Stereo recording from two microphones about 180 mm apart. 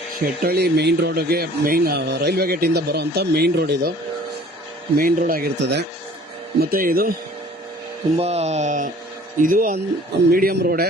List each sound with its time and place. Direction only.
0.2 s speech: 60° right (ahead or behind)
4.9 s speech: 55° right (ahead or behind)
8.2 s speech: 35° right (ahead or behind); by 10.8 s 60° right (ahead or behind)